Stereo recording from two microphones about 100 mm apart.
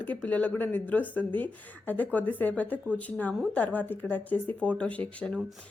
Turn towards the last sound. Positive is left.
turn(degrees=10)  # may be behind; listen again after turning